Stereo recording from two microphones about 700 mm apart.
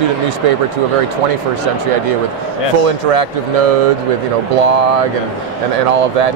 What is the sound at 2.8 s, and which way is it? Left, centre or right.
Speech, right.